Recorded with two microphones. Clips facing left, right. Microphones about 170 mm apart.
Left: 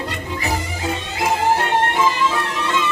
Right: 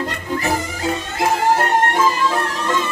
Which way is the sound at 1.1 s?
45° right (ahead or behind).